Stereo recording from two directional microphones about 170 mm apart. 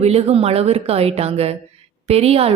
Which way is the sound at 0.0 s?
40° right (ahead or behind).